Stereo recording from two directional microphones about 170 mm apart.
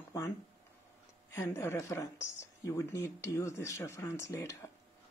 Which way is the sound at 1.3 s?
15° left (ahead or behind).